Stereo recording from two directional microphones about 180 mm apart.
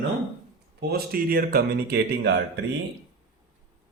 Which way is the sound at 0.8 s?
60° right (ahead or behind).